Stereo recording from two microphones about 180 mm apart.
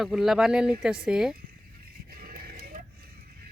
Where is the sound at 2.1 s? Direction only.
55° right (ahead or behind).